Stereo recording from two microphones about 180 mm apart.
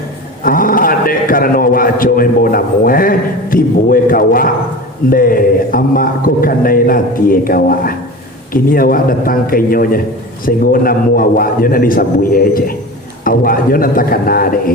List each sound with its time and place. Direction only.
0.4 s a man's voice: 50° left (ahead or behind)